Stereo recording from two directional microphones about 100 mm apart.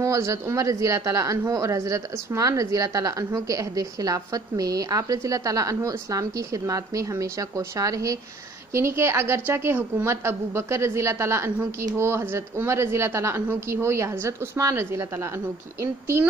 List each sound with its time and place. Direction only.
0.0 s a woman's voice: 30° right (ahead or behind)